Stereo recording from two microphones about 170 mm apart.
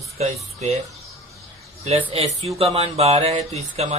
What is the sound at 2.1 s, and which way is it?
Speech, 35° right (ahead or behind).